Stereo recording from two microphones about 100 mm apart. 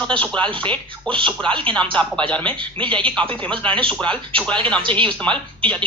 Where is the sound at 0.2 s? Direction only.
10° left (ahead or behind).